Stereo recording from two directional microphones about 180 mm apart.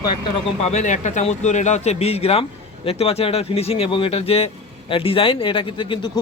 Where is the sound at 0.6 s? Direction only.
40° left (ahead or behind).